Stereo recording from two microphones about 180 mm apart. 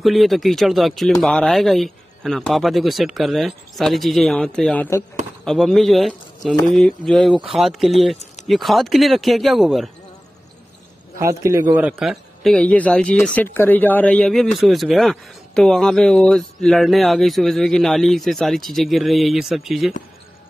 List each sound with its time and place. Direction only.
0.0 s a man's voice: centre (ahead or behind)
11.1 s a man's voice: 15° right (ahead or behind)